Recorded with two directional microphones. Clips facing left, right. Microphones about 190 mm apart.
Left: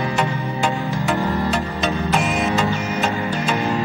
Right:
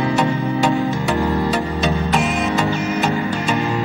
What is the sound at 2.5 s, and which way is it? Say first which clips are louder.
Music: right 2 dB; 15° right (ahead or behind).